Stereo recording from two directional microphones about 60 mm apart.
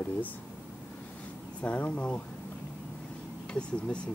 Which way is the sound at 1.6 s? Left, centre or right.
Left.